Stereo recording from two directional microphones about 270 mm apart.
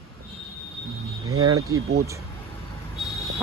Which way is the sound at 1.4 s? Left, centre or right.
Centre.